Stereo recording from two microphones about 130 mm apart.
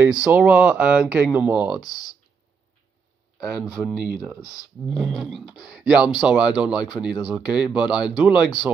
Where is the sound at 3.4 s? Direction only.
5° right (ahead or behind).